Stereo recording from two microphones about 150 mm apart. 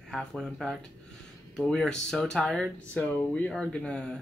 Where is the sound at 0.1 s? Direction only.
5° left (ahead or behind).